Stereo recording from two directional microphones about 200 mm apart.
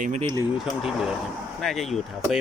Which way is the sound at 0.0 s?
35° right (ahead or behind).